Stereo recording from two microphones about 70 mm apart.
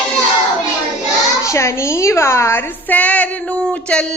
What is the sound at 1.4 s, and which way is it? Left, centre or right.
A woman's voice, left.